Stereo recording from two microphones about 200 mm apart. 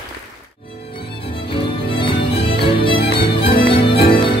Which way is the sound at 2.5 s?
25° left (ahead or behind).